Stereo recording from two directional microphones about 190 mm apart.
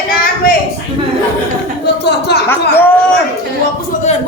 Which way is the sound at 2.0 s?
60° left (ahead or behind).